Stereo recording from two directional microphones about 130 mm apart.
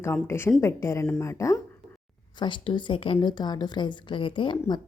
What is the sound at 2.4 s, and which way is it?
Speech, 40° left (ahead or behind).